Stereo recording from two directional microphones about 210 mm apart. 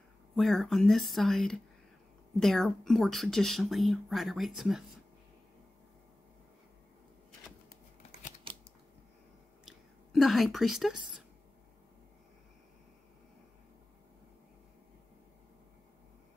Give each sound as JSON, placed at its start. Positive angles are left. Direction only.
{"t": 0.4, "sound": "speech", "side_deg": 0}
{"t": 8.5, "sound": "typewriter", "side_deg": -25}
{"t": 9.7, "sound": "whispering", "side_deg": 0}